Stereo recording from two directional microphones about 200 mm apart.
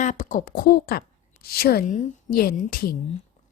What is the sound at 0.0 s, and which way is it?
A woman's voice, 40° left (ahead or behind).